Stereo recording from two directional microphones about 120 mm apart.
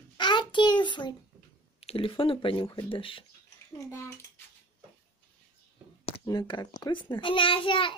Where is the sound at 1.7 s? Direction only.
50° left (ahead or behind).